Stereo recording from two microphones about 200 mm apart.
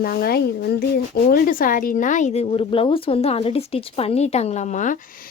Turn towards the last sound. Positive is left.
turn(degrees=40)  # may be behind; listen again after turning